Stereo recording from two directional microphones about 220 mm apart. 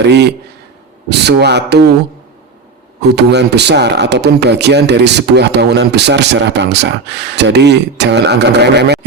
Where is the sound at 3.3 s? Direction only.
50° right (ahead or behind).